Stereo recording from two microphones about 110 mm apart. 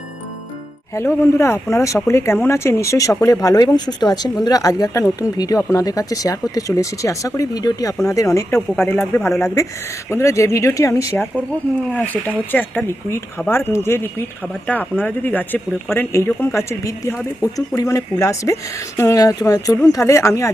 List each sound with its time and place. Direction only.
0.9 s speech: 25° left (ahead or behind)
11.9 s speech: 15° left (ahead or behind)